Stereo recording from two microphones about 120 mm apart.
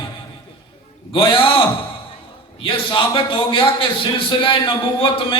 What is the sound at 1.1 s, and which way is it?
Speech, 45° left (ahead or behind).